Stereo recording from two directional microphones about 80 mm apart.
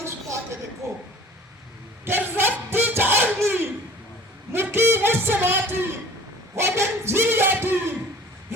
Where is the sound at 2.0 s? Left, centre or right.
Right.